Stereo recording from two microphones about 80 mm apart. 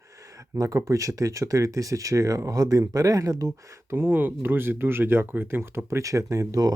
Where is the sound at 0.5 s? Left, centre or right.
Right.